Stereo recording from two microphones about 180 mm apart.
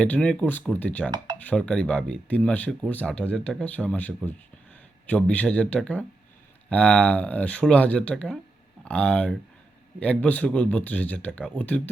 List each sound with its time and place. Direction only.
0.0 s speech: 5° left (ahead or behind)